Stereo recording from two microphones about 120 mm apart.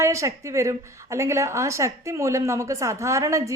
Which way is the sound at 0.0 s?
25° right (ahead or behind).